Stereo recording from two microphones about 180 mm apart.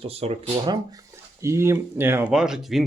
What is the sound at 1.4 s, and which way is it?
Speech, 15° right (ahead or behind).